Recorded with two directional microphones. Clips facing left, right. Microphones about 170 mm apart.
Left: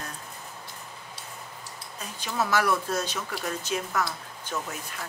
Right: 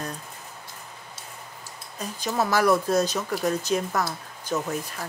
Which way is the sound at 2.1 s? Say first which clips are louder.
Right 3 dB; 40° right (ahead or behind).